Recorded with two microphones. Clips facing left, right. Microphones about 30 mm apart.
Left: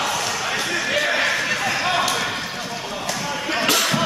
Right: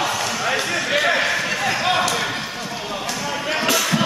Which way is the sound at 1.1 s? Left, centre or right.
Centre.